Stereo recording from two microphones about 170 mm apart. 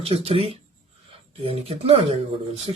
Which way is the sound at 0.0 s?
35° right (ahead or behind).